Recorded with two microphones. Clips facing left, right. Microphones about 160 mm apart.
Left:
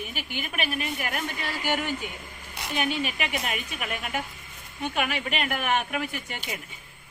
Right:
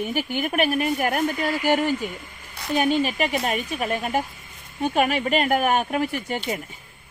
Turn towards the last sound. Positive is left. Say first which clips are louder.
# right 9 dB
turn(degrees=-40)  # may be behind; listen again after turning